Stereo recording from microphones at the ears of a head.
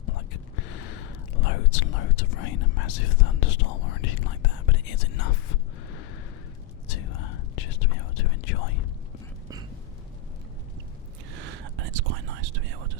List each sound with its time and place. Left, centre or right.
0.0 s whispering: left
11.3 s whispering: right